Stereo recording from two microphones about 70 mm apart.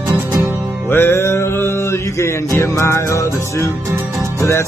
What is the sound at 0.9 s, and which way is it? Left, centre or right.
Music, left.